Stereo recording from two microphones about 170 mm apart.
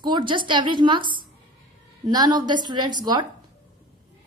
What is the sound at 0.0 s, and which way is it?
A woman's voice, 30° right (ahead or behind).